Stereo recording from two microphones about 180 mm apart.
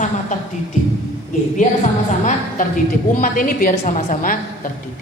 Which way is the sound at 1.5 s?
45° left (ahead or behind).